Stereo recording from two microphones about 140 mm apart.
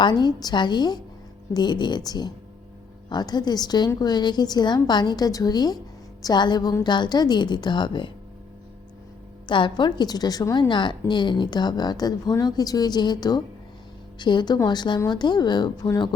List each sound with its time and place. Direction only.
0.0 s a woman's voice: 30° left (ahead or behind)
9.5 s a woman's voice: 35° left (ahead or behind)